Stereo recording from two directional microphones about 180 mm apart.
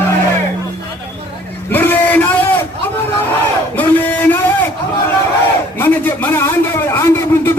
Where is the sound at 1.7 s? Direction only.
10° left (ahead or behind).